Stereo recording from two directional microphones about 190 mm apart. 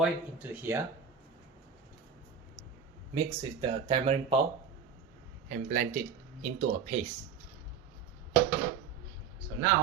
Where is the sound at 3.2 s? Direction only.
25° right (ahead or behind).